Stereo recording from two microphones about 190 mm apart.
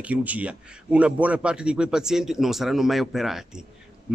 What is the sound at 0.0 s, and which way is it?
A man's voice, 10° right (ahead or behind).